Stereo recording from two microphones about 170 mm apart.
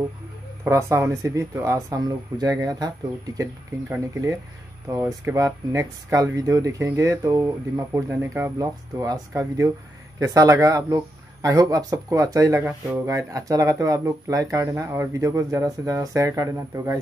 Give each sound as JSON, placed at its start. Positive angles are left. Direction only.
{"t": 0.7, "sound": "speech", "side_deg": -15}
{"t": 3.9, "sound": "speech", "side_deg": -15}